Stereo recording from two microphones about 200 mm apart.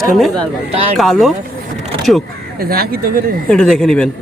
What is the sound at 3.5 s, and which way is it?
Speech, 5° left (ahead or behind).